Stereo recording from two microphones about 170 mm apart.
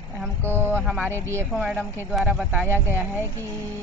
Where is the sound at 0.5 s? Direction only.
15° right (ahead or behind).